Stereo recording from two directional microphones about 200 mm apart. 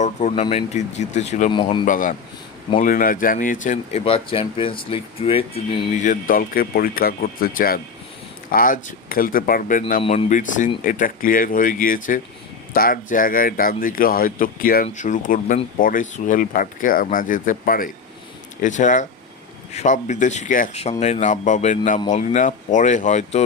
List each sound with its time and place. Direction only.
0.0 s speech: 35° left (ahead or behind)
10.0 s speech: 30° left (ahead or behind)